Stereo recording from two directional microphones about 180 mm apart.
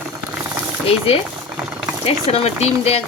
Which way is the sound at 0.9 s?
35° left (ahead or behind).